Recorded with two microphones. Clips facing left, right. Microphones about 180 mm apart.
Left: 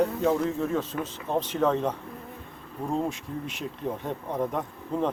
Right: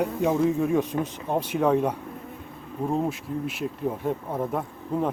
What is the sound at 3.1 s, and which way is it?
Bee, 5° right (ahead or behind).